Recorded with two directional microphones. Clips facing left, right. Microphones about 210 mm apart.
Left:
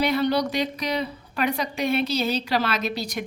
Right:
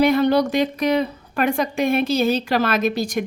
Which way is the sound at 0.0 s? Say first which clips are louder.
Right 6 dB; 50° right (ahead or behind).